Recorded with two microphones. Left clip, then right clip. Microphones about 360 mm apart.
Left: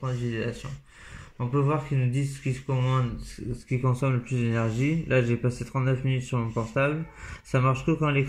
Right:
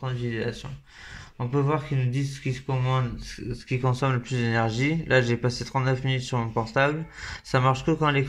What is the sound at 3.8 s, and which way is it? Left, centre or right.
Speech, right.